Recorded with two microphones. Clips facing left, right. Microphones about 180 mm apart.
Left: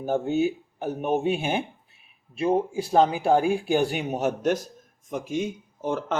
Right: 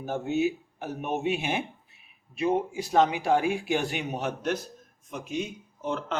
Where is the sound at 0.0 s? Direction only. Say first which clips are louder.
Left 3 dB; 30° left (ahead or behind).